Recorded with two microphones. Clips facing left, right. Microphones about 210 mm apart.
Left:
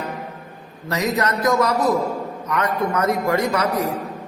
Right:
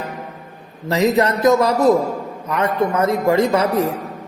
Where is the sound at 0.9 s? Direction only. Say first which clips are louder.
Right 6 dB; 25° right (ahead or behind).